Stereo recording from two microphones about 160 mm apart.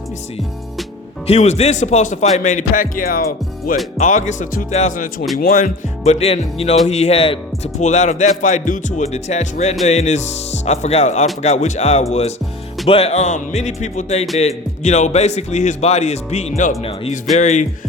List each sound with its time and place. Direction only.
1.3 s speech: 45° left (ahead or behind); by 3.8 s 65° left (ahead or behind)
3.9 s speech: 50° left (ahead or behind)
6.1 s music: 40° left (ahead or behind)
6.8 s speech: 45° left (ahead or behind)
16.8 s music: 35° left (ahead or behind)
17.3 s speech: 50° left (ahead or behind)